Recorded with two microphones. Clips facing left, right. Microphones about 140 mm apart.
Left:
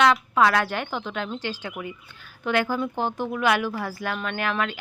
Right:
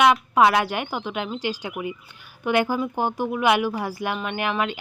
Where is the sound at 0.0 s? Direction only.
15° right (ahead or behind).